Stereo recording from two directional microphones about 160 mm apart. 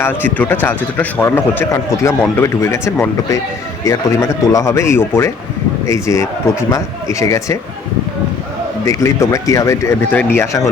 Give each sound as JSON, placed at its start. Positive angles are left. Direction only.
{"t": 0.0, "sound": "a man's voice", "side_deg": 10}
{"t": 8.9, "sound": "a man's voice", "side_deg": 20}